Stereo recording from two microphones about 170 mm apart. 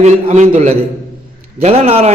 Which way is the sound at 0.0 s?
40° right (ahead or behind).